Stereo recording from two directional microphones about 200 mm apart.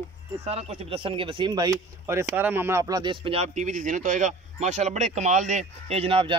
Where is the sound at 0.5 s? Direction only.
30° right (ahead or behind).